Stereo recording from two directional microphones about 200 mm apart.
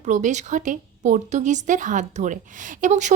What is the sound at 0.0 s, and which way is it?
A woman's voice, 35° right (ahead or behind).